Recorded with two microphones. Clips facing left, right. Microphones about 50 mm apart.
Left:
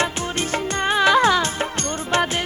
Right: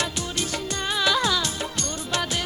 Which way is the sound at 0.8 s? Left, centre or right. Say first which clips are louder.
Left 7 dB; left.